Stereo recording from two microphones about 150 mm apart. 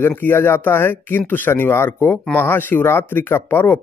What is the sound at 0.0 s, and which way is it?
Speech, 15° left (ahead or behind).